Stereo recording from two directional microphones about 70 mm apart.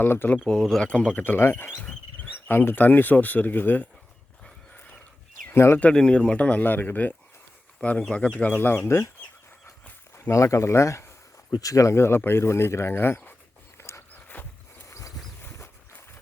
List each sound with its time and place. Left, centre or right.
0.0 s speech: left
0.4 s speech: centre
1.2 s speech: left
5.5 s speech: left
5.8 s speech: centre; by 9.0 s left
10.2 s speech: left
13.7 s a sound: left
14.3 s a sound: left
14.8 s dog: left